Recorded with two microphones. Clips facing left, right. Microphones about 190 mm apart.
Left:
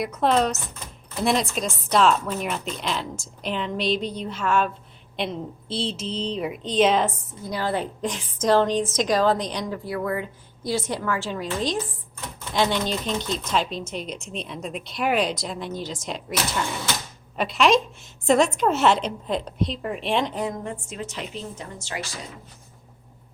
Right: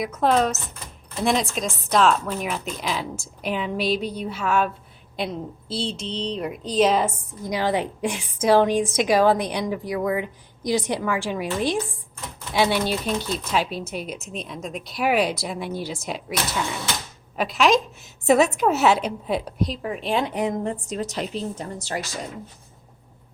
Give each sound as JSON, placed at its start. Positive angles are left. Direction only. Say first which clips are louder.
{"t": 0.0, "sound": "a woman's voice", "louder": "right 1 dB", "side_deg": 0}
{"t": 17.3, "sound": "a woman's voice", "louder": "even", "side_deg": 0}
{"t": 20.3, "sound": "a woman's voice", "louder": "right 3 dB", "side_deg": -20}
{"t": 20.7, "sound": "a woman's voice", "louder": "right 5 dB", "side_deg": -35}